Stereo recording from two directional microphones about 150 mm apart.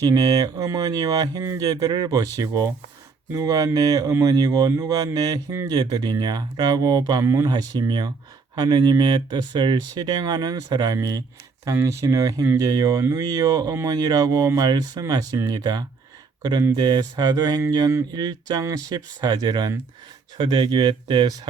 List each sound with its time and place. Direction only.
0.0 s speech: 25° right (ahead or behind)